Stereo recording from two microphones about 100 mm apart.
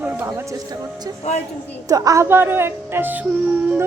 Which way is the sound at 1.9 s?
35° right (ahead or behind).